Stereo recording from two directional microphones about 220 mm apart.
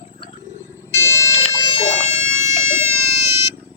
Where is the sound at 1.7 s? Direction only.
30° left (ahead or behind).